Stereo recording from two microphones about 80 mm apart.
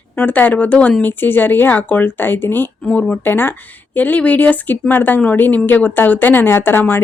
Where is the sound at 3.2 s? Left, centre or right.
Left.